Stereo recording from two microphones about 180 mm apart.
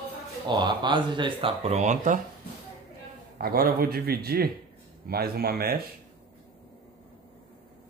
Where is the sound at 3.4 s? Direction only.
55° right (ahead or behind).